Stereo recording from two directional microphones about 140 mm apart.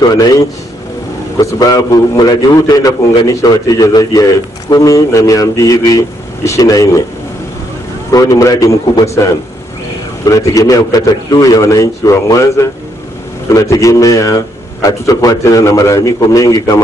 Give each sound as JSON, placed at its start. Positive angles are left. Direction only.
{"t": 1.4, "sound": "a man's voice", "side_deg": 25}
{"t": 8.1, "sound": "a man's voice", "side_deg": 25}
{"t": 10.2, "sound": "a man's voice", "side_deg": 25}